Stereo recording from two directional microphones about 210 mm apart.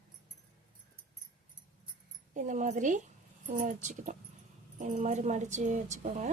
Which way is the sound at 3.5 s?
35° right (ahead or behind).